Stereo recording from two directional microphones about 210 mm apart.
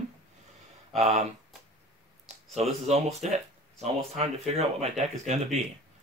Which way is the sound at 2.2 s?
30° right (ahead or behind).